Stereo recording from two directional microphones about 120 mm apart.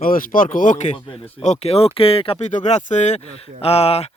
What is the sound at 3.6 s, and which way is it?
Speech, 55° left (ahead or behind).